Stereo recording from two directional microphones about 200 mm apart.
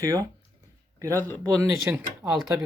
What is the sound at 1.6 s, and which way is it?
Speech, 10° right (ahead or behind).